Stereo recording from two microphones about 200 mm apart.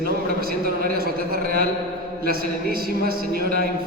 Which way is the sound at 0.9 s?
50° right (ahead or behind).